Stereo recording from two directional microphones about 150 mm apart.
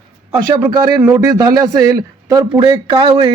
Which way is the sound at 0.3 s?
25° right (ahead or behind).